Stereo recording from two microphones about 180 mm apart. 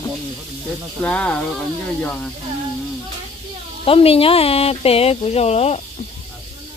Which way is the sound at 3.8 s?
30° left (ahead or behind).